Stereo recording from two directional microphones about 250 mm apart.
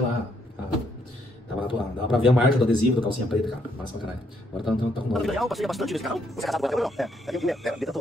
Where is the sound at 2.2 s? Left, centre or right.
Centre.